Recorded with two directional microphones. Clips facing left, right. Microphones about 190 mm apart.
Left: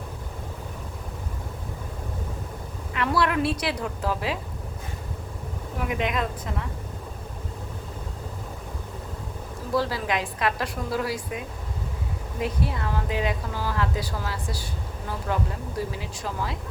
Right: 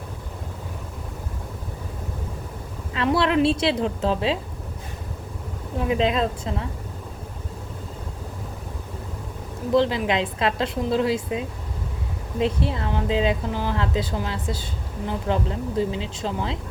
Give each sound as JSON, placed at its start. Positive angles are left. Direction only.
{"t": 2.9, "sound": "a woman's voice", "side_deg": -25}
{"t": 5.8, "sound": "a woman's voice", "side_deg": -25}
{"t": 9.7, "sound": "a woman's voice", "side_deg": -20}